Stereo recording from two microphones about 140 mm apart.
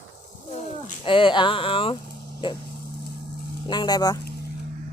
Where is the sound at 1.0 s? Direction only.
40° left (ahead or behind).